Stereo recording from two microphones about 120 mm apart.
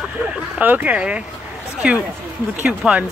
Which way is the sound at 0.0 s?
10° right (ahead or behind).